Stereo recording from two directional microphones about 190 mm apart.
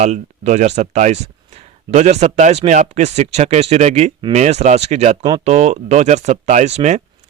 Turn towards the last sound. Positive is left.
turn(degrees=-35)  # may be behind; listen again after turning